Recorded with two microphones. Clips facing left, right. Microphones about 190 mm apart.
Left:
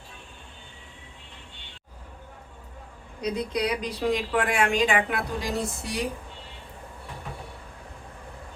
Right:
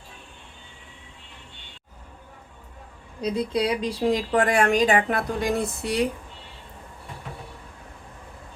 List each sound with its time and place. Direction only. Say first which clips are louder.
3.2 s speech: right 3 dB; 30° right (ahead or behind)
5.4 s a woman's voice: right 5 dB; 60° right (ahead or behind)